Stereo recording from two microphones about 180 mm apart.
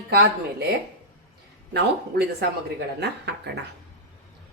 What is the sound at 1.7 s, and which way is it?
A woman's voice, 65° right (ahead or behind).